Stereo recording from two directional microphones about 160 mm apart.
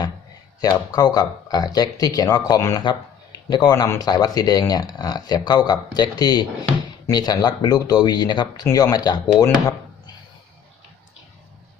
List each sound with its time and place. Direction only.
0.6 s speech: 25° left (ahead or behind)